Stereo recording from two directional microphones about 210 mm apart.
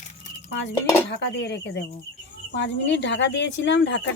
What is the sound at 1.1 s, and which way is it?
Speech, 55° left (ahead or behind).